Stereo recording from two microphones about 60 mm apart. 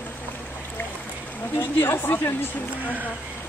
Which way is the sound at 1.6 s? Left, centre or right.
Left.